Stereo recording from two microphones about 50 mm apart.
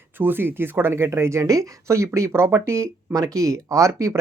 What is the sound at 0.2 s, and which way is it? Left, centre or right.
Speech, right.